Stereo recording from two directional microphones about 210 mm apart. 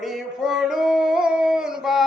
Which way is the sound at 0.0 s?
Centre (ahead or behind).